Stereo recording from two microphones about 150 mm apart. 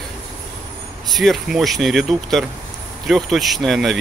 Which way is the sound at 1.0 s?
Centre (ahead or behind).